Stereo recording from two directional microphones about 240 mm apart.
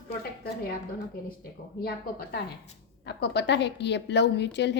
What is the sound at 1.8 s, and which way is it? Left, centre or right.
A woman's voice, left.